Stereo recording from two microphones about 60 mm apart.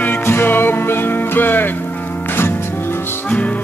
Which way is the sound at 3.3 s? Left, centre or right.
Left.